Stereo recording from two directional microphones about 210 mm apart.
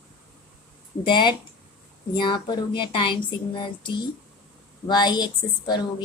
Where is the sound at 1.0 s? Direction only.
20° left (ahead or behind).